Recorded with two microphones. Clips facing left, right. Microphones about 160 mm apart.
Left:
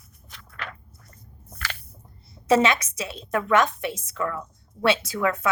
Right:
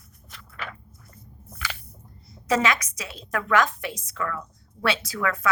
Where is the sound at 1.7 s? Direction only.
5° right (ahead or behind).